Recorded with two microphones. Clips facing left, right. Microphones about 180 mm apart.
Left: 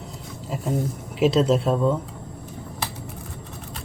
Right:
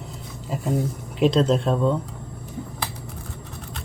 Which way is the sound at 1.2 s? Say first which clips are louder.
Even; 5° left (ahead or behind).